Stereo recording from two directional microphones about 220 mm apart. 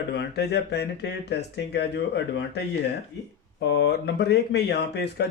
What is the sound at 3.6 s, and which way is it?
Speech, 50° left (ahead or behind).